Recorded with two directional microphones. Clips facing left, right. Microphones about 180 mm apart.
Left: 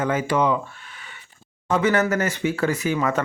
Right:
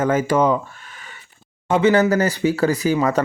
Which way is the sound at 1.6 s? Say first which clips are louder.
Right 5 dB; 25° right (ahead or behind).